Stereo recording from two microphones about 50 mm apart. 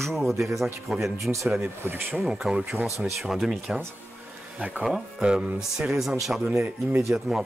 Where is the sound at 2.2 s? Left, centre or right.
Centre.